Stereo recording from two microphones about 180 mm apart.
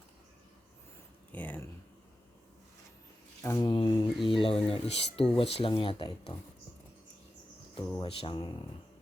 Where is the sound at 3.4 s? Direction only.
20° left (ahead or behind).